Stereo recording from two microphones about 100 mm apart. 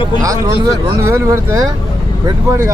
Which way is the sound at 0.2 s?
35° right (ahead or behind).